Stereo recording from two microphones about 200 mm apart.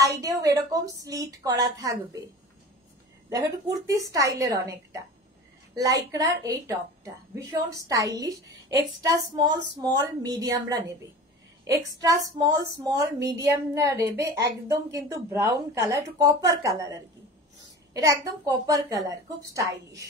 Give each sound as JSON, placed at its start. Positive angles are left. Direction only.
{"t": 0.0, "sound": "speech", "side_deg": -15}
{"t": 3.3, "sound": "a woman's voice", "side_deg": -15}
{"t": 17.9, "sound": "speech", "side_deg": -20}